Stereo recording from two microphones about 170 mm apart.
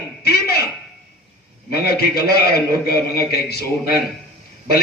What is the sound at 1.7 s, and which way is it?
A woman's voice, 65° left (ahead or behind).